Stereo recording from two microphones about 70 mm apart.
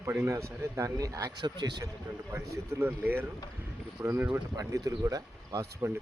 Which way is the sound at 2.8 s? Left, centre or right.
Right.